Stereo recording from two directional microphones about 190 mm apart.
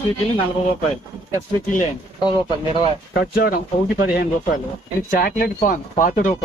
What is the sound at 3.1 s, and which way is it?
Speech, 50° left (ahead or behind).